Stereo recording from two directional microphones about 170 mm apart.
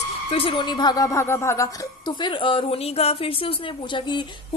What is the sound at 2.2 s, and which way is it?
A woman's voice, 30° left (ahead or behind).